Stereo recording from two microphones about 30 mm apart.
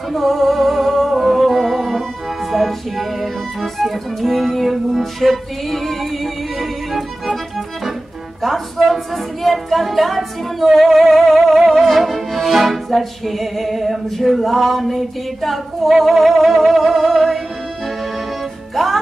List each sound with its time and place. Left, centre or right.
0.1 s music: centre
8.4 s speech: centre
18.8 s music: centre